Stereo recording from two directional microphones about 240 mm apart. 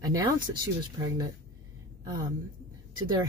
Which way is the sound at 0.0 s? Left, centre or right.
Centre.